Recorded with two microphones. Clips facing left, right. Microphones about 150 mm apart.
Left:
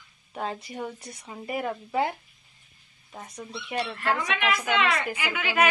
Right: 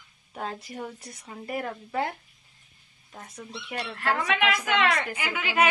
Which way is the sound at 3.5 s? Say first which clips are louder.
Left 4 dB; centre (ahead or behind).